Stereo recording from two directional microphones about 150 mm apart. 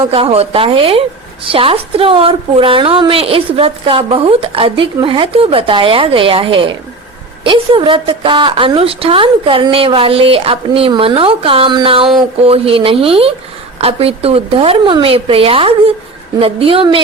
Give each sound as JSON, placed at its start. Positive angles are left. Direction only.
{"t": 0.1, "sound": "a woman's voice", "side_deg": -40}